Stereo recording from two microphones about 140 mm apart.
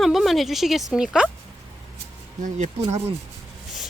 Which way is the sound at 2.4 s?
60° right (ahead or behind).